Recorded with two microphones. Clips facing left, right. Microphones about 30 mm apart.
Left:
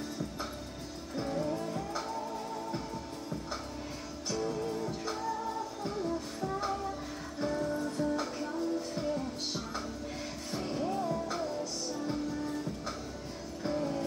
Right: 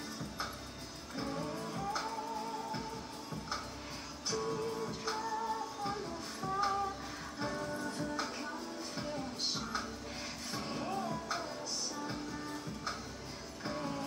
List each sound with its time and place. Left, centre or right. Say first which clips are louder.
1.1 s music: left 6 dB; centre
4.3 s music: left 2 dB; centre
7.3 s music: left 6 dB; centre
7.6 s music: left 6 dB; centre
10.5 s music: left 5 dB; centre